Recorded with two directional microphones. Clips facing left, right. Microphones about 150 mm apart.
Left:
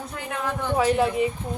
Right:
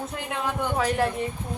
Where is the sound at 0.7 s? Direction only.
10° left (ahead or behind).